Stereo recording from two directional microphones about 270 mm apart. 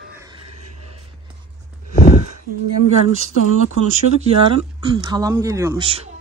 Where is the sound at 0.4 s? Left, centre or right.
Right.